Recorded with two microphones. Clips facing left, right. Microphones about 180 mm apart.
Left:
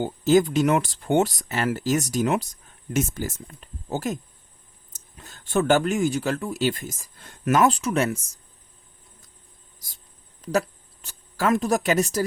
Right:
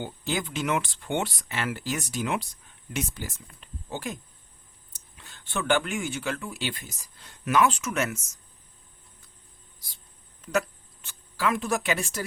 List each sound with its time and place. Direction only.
0.0 s speech: 40° left (ahead or behind)
10.4 s speech: 35° left (ahead or behind)